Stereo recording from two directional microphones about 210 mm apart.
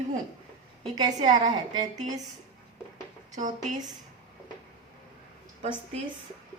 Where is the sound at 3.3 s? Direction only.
35° right (ahead or behind).